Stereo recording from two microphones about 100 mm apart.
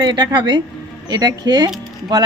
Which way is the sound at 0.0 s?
50° right (ahead or behind).